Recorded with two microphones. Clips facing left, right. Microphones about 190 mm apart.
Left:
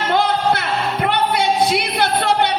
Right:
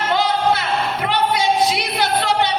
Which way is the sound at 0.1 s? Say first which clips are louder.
Left 1 dB; 55° left (ahead or behind).